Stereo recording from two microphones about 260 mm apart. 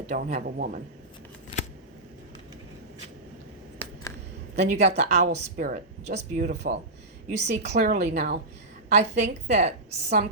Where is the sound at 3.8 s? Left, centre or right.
Centre.